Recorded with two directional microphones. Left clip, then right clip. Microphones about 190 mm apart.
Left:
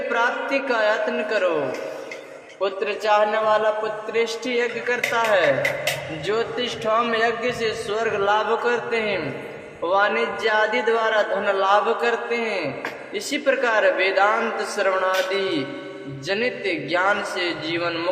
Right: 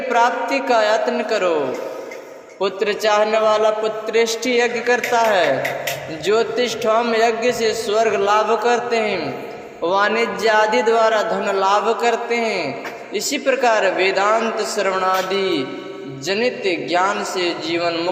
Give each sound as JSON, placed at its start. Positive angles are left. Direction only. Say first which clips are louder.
{"t": 0.1, "sound": "a man's voice", "louder": "right 6 dB", "side_deg": -25}
{"t": 2.6, "sound": "a man's voice", "louder": "right 4 dB", "side_deg": -30}